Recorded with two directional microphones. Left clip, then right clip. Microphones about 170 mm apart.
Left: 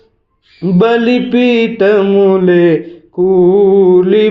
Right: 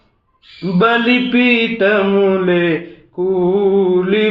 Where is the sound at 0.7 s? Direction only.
45° left (ahead or behind).